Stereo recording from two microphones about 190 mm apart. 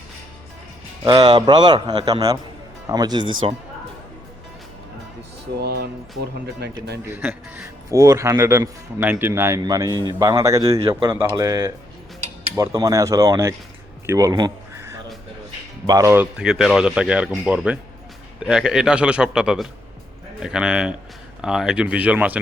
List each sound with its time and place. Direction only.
1.0 s speech: 25° right (ahead or behind)
6.6 s a man's voice: 60° right (ahead or behind)
7.0 s a man's voice: 10° right (ahead or behind)
15.9 s a man's voice: 15° right (ahead or behind)
16.4 s a man's voice: 5° right (ahead or behind)